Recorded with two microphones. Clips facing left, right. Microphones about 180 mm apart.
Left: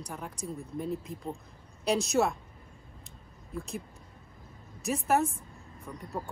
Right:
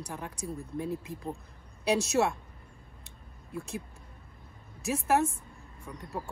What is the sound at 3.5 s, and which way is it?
Speech, centre (ahead or behind).